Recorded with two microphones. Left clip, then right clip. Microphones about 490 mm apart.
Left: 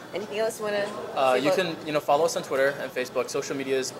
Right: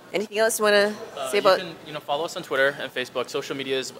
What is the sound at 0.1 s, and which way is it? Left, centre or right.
Speech, right.